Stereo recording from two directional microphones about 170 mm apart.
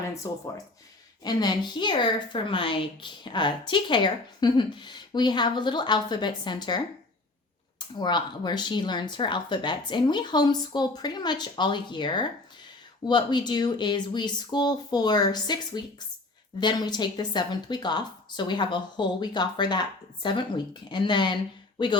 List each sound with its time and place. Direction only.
0.1 s a woman's voice: 20° left (ahead or behind)